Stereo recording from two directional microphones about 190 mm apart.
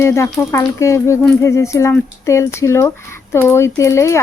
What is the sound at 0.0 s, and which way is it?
Speech, 15° left (ahead or behind).